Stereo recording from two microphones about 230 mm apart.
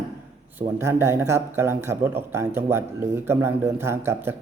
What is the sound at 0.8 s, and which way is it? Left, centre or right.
Speech, centre.